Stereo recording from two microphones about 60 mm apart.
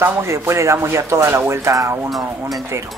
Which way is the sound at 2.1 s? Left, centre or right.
Centre.